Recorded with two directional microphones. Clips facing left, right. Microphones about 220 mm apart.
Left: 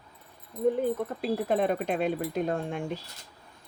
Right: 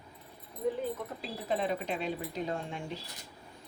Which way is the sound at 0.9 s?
55° left (ahead or behind).